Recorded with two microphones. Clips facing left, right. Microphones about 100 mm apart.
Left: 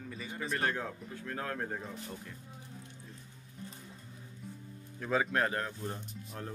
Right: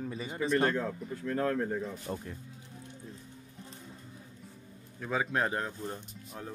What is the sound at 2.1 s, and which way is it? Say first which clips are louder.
Speech: right 8 dB; 45° right (ahead or behind).